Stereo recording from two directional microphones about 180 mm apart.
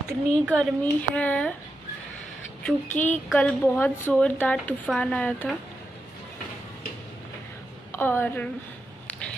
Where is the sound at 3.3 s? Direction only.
5° left (ahead or behind).